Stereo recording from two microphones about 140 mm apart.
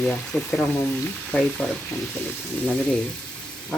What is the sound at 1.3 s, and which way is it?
Frying, 10° left (ahead or behind).